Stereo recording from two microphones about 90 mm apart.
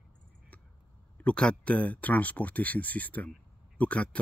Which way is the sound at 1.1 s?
10° left (ahead or behind).